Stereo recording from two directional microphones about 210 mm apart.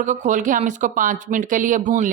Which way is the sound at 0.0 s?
35° right (ahead or behind).